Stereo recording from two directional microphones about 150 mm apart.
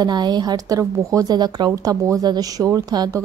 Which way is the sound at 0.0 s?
30° right (ahead or behind).